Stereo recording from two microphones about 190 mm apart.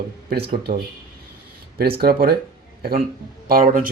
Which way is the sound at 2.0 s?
50° right (ahead or behind).